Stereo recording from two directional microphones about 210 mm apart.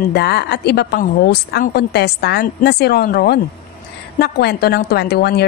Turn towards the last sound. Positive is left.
turn(degrees=50)  # may be behind; listen again after turning